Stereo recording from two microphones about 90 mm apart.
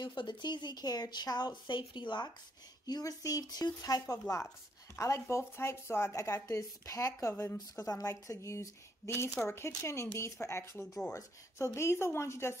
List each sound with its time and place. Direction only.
0.0 s speech: 60° left (ahead or behind)
2.9 s a woman's voice: 40° left (ahead or behind)
4.1 s a woman's voice: 35° left (ahead or behind)
7.7 s a woman's voice: 40° left (ahead or behind)